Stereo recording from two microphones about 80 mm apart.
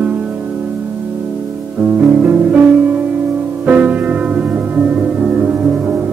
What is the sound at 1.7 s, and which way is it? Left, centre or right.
Music, centre.